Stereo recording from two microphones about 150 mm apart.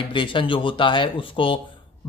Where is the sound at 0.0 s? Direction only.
35° left (ahead or behind).